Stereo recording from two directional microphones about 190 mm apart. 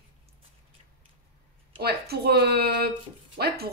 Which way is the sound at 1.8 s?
55° right (ahead or behind).